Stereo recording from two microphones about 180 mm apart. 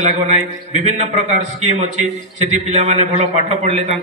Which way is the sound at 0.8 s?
40° right (ahead or behind).